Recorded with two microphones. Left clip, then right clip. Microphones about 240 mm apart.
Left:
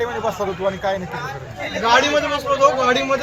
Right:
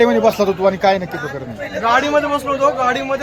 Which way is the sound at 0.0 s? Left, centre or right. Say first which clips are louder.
Right 9 dB; right.